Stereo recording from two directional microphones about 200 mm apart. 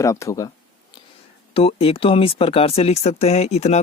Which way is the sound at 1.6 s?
30° left (ahead or behind).